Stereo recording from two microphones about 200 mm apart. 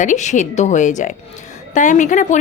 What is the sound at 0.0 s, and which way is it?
Speech, 35° left (ahead or behind).